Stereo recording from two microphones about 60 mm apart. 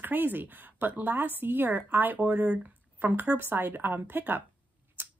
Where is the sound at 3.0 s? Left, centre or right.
Right.